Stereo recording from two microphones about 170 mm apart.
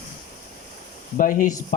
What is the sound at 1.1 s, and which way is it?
Speech, 50° left (ahead or behind).